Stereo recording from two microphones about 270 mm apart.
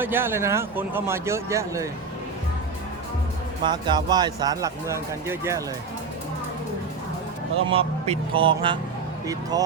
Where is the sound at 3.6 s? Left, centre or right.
Centre.